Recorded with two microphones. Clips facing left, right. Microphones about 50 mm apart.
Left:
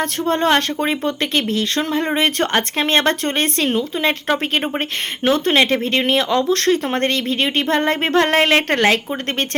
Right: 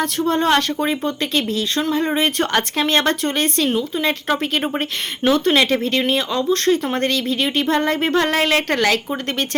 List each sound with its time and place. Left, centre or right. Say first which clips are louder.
0.3 s a woman's voice: left 1 dB; left
2.5 s speech: even; left
2.8 s a woman's voice: left 1 dB; left
6.1 s speech: left 2 dB; left
6.8 s a woman's voice: left 1 dB; left